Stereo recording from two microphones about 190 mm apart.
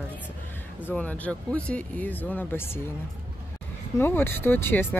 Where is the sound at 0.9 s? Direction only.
5° left (ahead or behind).